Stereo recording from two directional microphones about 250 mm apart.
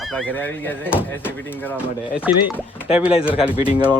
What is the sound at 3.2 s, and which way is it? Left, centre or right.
Speech, left.